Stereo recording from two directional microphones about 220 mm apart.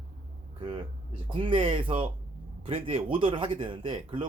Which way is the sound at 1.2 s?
25° right (ahead or behind).